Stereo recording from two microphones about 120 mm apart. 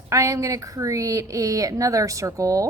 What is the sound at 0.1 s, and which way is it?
A woman's voice, 25° right (ahead or behind).